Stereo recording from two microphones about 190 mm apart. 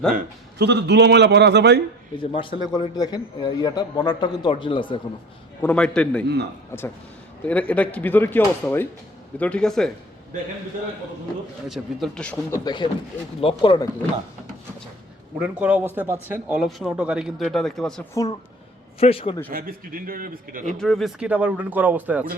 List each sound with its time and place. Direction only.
0.6 s a man's voice: 60° right (ahead or behind)
2.3 s a man's voice: 25° left (ahead or behind)
5.6 s a man's voice: 5° left (ahead or behind)
11.7 s a man's voice: centre (ahead or behind); by 13.8 s 25° left (ahead or behind)
15.4 s speech: 5° right (ahead or behind)
18.1 s speech: 15° left (ahead or behind)
18.9 s a man's voice: 30° left (ahead or behind)
19.5 s a man's voice: 50° right (ahead or behind)
20.7 s a man's voice: centre (ahead or behind)